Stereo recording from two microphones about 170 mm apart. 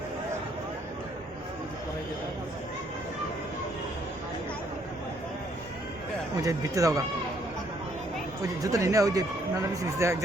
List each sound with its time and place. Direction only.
6.3 s speech: 20° right (ahead or behind)
8.6 s speech: 20° right (ahead or behind)